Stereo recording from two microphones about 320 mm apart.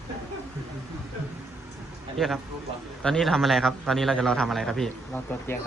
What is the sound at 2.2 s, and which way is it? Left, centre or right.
A man's voice, centre.